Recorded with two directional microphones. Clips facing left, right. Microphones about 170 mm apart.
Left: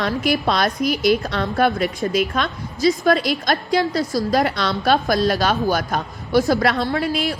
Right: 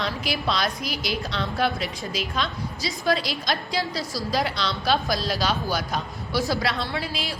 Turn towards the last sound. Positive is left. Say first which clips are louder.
# left 8 dB
turn(degrees=45)  # may be behind; listen again after turning